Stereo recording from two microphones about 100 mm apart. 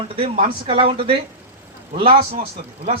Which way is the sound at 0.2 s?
70° right (ahead or behind).